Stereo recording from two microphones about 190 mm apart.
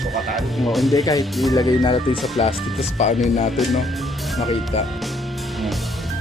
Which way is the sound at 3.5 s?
Centre (ahead or behind).